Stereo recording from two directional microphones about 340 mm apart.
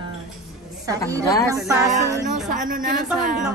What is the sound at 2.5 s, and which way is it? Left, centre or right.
Speech, right.